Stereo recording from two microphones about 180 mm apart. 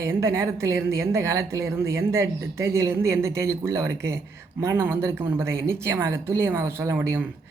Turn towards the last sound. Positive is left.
turn(degrees=-10)  # may be behind; listen again after turning